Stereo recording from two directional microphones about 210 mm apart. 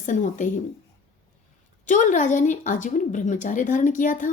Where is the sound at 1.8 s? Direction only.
35° left (ahead or behind).